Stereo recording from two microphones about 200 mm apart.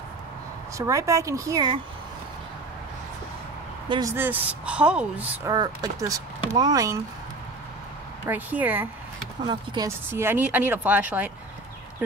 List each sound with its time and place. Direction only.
0.7 s a woman's voice: 15° right (ahead or behind)
3.9 s a woman's voice: 15° right (ahead or behind)
5.5 s speech: 20° right (ahead or behind)
8.3 s a woman's voice: 10° right (ahead or behind)